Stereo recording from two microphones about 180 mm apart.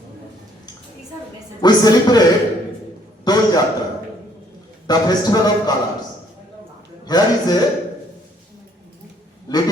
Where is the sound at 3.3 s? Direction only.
20° left (ahead or behind).